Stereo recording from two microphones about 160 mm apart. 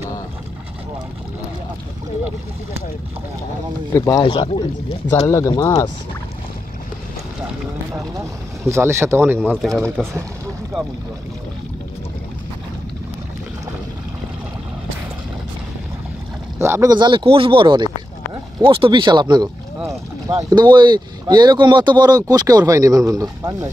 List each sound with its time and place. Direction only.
3.9 s speech: 20° left (ahead or behind)
4.2 s speech: 30° left (ahead or behind)
5.1 s speech: 20° left (ahead or behind)
7.9 s speech: 20° right (ahead or behind)
9.6 s speech: centre (ahead or behind)
9.8 s speech: 15° right (ahead or behind)
16.5 s speech: 15° right (ahead or behind)